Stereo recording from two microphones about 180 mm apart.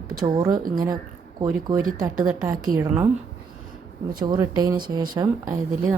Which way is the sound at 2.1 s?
5° right (ahead or behind).